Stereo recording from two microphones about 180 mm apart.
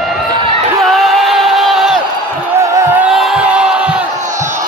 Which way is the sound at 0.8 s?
Centre (ahead or behind).